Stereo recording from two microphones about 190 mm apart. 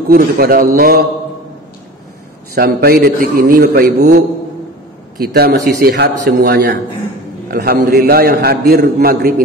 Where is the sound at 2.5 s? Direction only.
55° right (ahead or behind).